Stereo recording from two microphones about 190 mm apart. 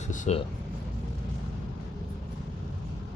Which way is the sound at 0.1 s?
35° left (ahead or behind).